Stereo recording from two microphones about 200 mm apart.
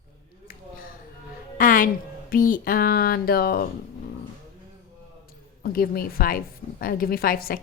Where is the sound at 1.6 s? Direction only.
40° left (ahead or behind).